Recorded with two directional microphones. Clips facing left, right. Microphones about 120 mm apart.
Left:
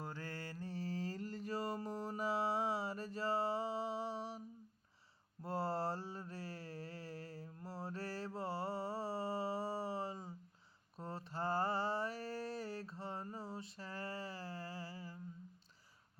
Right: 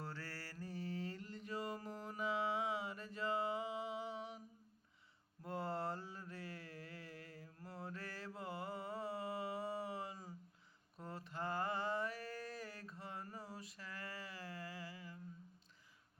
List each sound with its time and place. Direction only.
0.0 s mantra: 20° left (ahead or behind)